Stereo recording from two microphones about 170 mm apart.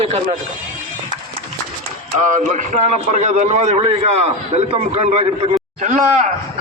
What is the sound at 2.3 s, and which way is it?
A man's voice, 45° right (ahead or behind).